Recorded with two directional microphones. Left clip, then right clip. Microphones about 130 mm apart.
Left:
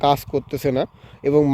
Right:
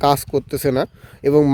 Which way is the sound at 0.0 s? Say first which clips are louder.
Right 2 dB; 45° right (ahead or behind).